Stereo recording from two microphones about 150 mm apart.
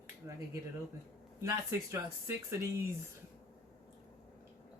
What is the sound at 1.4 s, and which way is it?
Speech, 20° right (ahead or behind).